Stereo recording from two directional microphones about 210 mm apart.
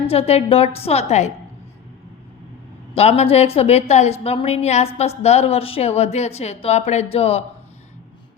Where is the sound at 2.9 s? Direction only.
30° left (ahead or behind).